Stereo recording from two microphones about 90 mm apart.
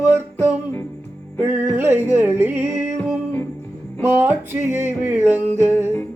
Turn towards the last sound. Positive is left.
turn(degrees=-20)  # may be behind; listen again after turning